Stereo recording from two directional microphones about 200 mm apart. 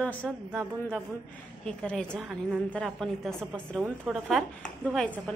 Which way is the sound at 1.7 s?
5° left (ahead or behind).